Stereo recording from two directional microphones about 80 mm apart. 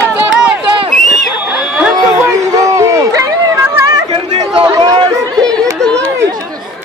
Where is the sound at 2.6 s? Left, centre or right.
Right.